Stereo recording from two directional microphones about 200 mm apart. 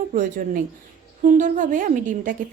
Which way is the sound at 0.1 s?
40° right (ahead or behind).